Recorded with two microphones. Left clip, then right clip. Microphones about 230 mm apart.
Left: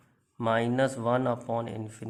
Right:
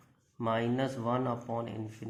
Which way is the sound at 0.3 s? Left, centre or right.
Left.